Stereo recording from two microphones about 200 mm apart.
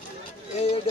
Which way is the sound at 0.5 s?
35° left (ahead or behind).